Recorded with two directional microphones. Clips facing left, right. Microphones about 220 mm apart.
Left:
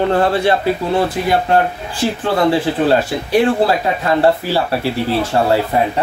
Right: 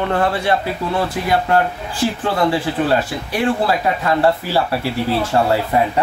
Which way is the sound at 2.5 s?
25° left (ahead or behind).